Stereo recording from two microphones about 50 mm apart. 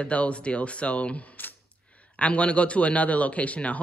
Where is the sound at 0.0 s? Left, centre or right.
Left.